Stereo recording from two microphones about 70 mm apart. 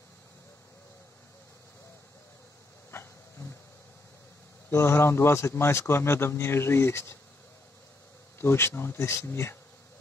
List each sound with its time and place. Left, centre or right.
2.9 s a sound: left
4.6 s speech: left
8.4 s speech: left